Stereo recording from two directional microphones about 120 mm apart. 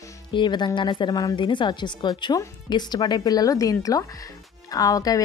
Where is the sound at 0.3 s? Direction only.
40° left (ahead or behind).